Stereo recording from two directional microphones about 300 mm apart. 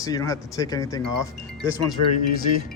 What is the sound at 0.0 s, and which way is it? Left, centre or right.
Speech, centre.